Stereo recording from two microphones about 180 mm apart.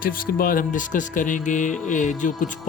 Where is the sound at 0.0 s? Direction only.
50° left (ahead or behind).